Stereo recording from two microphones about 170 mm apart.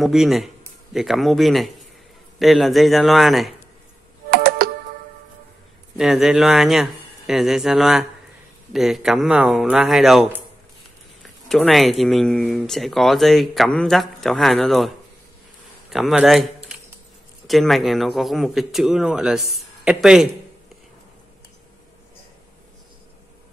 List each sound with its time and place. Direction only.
0.0 s speech: centre (ahead or behind)
4.3 s computer keyboard: 60° right (ahead or behind)
5.9 s speech: centre (ahead or behind)
11.2 s speech: centre (ahead or behind)
15.9 s speech: centre (ahead or behind)